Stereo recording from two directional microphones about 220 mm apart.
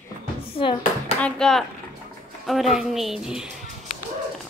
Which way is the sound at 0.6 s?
25° left (ahead or behind).